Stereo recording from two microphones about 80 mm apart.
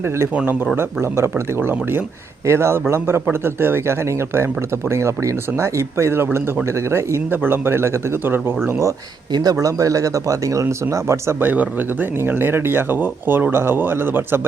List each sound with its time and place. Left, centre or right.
0.8 s a man's voice: right
9.3 s speech: right